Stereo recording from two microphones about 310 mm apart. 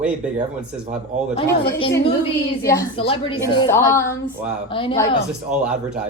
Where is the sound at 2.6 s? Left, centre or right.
Centre.